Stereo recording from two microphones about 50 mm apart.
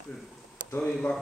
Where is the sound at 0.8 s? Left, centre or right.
Left.